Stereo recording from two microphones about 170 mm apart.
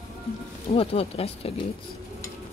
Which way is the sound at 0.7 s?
35° left (ahead or behind).